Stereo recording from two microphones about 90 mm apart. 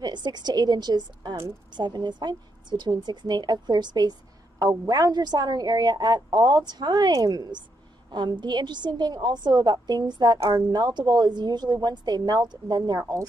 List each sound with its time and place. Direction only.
0.0 s a woman's voice: 55° right (ahead or behind)